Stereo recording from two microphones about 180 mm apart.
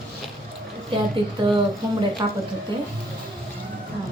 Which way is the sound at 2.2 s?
25° right (ahead or behind).